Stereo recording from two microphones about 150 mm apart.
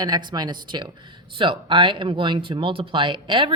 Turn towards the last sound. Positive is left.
turn(degrees=-30)  # may be behind; listen again after turning